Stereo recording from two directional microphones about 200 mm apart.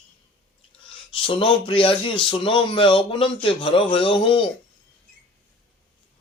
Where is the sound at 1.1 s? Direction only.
25° left (ahead or behind).